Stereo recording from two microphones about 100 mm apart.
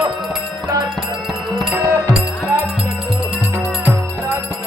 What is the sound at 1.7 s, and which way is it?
Music, 30° right (ahead or behind).